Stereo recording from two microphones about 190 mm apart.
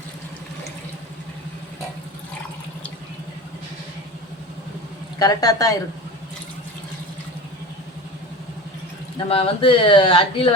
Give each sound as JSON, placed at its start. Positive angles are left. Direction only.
{"t": 5.2, "sound": "speech", "side_deg": 20}
{"t": 9.1, "sound": "speech", "side_deg": 30}